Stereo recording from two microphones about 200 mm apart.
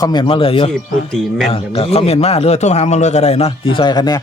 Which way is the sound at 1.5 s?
30° left (ahead or behind).